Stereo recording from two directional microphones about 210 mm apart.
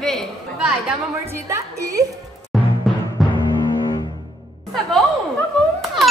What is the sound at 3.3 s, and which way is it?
Music, 20° left (ahead or behind).